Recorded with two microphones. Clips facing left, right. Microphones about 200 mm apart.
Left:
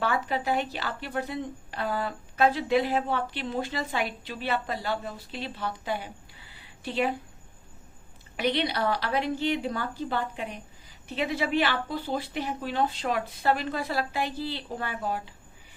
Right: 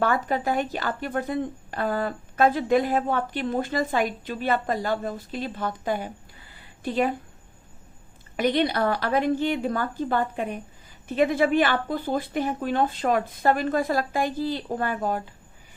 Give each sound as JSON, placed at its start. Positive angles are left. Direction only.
{"t": 0.0, "sound": "a woman's voice", "side_deg": -45}
{"t": 8.4, "sound": "a woman's voice", "side_deg": -50}